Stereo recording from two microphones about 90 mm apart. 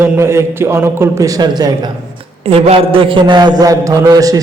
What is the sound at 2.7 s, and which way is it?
Speech, 85° right.